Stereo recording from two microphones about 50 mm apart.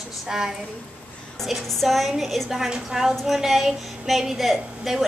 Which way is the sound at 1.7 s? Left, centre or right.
Centre.